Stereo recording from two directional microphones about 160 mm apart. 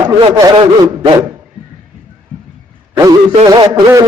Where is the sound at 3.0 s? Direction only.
25° right (ahead or behind).